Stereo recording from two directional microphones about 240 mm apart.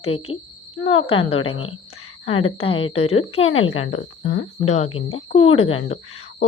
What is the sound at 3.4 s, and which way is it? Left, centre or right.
Speech, left.